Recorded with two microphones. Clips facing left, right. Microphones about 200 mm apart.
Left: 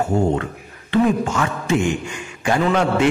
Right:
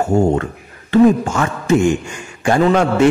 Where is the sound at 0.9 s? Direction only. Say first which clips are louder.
Right 6 dB; 45° right (ahead or behind).